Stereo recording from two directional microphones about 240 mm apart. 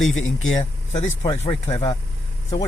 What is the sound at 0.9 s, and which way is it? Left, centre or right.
Speech, left.